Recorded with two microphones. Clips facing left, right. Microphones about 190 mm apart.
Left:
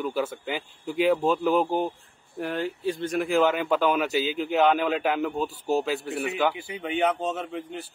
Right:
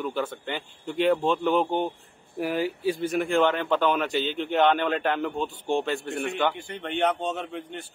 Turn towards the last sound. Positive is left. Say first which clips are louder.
# left 1 dB
turn(degrees=0)  # may be behind; listen again after turning